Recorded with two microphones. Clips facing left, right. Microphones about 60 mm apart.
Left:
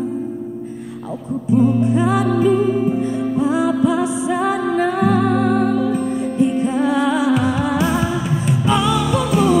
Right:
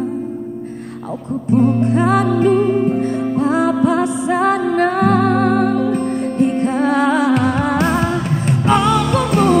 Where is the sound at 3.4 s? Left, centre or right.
Right.